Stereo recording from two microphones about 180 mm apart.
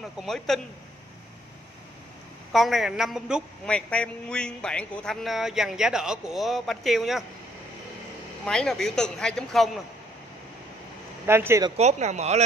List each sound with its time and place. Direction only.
0.0 s speech: centre (ahead or behind)
2.5 s speech: centre (ahead or behind)
8.5 s speech: centre (ahead or behind)
11.2 s speech: 15° right (ahead or behind)
11.7 s speech: 40° right (ahead or behind)